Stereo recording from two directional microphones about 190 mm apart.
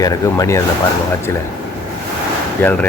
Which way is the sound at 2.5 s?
10° left (ahead or behind).